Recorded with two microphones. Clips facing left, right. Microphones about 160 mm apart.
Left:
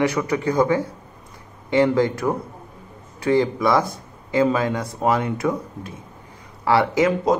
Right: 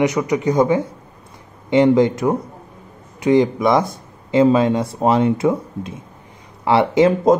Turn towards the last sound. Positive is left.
turn(degrees=-25)  # may be behind; listen again after turning